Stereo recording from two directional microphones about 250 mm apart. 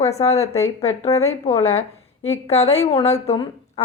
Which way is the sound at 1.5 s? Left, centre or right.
Left.